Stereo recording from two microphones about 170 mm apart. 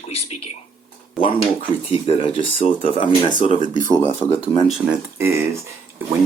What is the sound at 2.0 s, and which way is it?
Speech, 30° left (ahead or behind).